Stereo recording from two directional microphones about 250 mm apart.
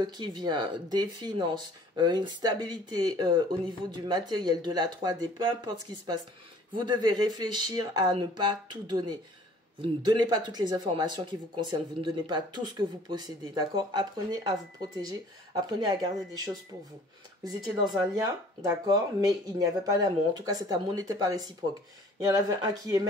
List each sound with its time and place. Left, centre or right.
0.0 s speech: centre
18.1 s speech: centre